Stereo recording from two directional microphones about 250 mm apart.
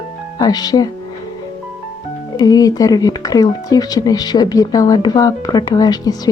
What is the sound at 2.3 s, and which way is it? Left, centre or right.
Speech, centre.